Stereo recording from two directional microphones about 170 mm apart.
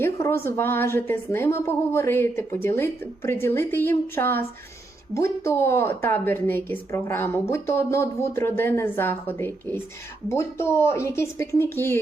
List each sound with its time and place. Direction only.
0.0 s a woman's voice: 15° left (ahead or behind)